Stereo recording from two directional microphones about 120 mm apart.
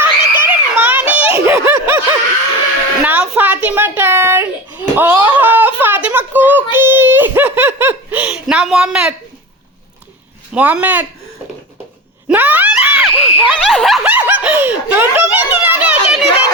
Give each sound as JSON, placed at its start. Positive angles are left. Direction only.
{"t": 0.0, "sound": "a sound", "side_deg": -15}
{"t": 1.5, "sound": "snicker", "side_deg": -20}
{"t": 3.0, "sound": "a sound", "side_deg": -10}
{"t": 6.7, "sound": "giggle", "side_deg": -20}
{"t": 10.5, "sound": "speech", "side_deg": -10}
{"t": 12.3, "sound": "screaming", "side_deg": -15}
{"t": 13.1, "sound": "snicker", "side_deg": 0}
{"t": 14.0, "sound": "snicker", "side_deg": -10}